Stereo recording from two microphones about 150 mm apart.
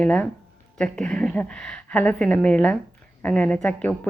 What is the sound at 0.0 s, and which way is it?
A woman's voice, 10° left (ahead or behind).